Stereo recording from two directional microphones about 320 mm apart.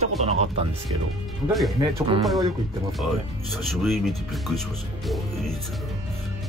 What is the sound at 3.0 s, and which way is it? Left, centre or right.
Speech, centre.